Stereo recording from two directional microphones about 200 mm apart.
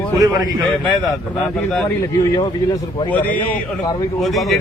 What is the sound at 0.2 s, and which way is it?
Speech, 20° right (ahead or behind).